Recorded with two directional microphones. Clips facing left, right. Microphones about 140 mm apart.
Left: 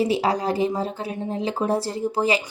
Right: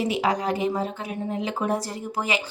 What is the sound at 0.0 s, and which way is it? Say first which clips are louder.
A woman's voice: left 3 dB; 35° left (ahead or behind).